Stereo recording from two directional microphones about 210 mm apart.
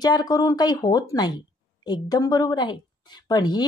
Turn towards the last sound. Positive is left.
turn(degrees=20)  # may be behind; listen again after turning